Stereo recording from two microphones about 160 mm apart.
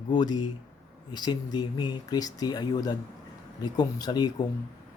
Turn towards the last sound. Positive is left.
turn(degrees=25)  # may be behind; listen again after turning